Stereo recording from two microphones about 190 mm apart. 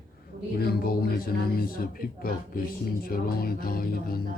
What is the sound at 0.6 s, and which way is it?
A man's voice, 50° left (ahead or behind).